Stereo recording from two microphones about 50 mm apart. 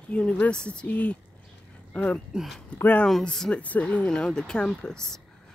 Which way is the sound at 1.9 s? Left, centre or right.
Left.